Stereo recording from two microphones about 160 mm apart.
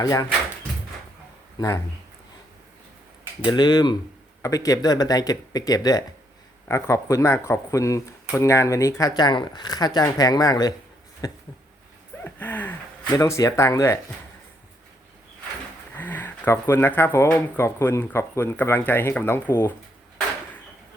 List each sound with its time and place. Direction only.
0.0 s speech: 20° left (ahead or behind)
1.5 s speech: 20° left (ahead or behind)
3.4 s speech: 30° left (ahead or behind)
12.2 s a sound: 10° left (ahead or behind)
13.1 s speech: 20° left (ahead or behind)
16.0 s speech: 10° left (ahead or behind)